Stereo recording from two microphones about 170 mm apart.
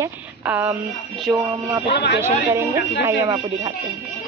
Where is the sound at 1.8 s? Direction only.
90° left.